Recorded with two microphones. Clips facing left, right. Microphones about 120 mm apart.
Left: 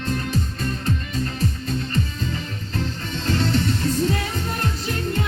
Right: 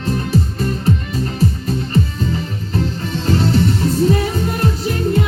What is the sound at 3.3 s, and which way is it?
Music, 10° right (ahead or behind).